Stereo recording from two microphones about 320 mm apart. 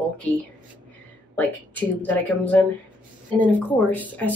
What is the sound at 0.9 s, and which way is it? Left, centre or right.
A woman's voice, centre.